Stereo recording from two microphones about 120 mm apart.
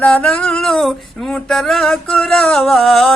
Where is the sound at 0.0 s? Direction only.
10° left (ahead or behind).